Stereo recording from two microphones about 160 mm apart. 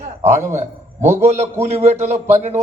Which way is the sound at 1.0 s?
15° right (ahead or behind).